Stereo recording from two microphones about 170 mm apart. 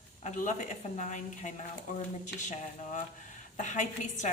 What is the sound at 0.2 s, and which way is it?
A woman's voice, 45° left (ahead or behind).